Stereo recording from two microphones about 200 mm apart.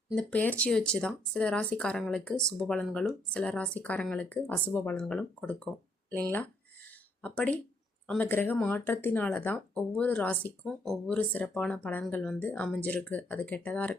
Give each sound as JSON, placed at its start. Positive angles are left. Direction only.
{"t": 0.1, "sound": "speech", "side_deg": 5}
{"t": 7.2, "sound": "speech", "side_deg": 5}